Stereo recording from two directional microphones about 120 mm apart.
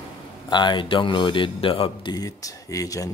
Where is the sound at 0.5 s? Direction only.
40° left (ahead or behind).